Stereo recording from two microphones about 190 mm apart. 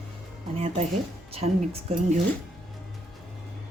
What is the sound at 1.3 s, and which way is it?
Speech, 35° right (ahead or behind).